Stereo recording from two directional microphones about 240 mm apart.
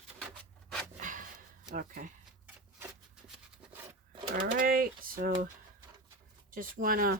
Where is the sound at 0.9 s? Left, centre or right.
Right.